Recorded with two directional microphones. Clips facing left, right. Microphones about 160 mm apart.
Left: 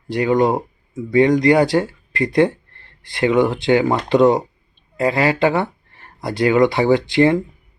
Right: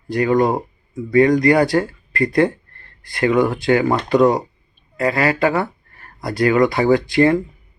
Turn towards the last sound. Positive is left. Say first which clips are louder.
# even
turn(degrees=20)  # may be behind; listen again after turning